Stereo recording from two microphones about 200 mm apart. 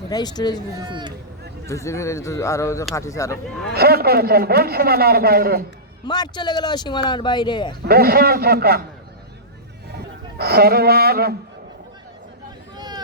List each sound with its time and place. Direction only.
0.1 s speech: 20° left (ahead or behind)
0.8 s speech: 25° right (ahead or behind)
1.6 s a man's voice: 15° left (ahead or behind)
3.8 s a man's voice: 50° right (ahead or behind)
6.1 s speech: 20° left (ahead or behind)
7.9 s a man's voice: 50° right (ahead or behind)
10.3 s a man's voice: 50° right (ahead or behind)
12.7 s a sound: 20° right (ahead or behind)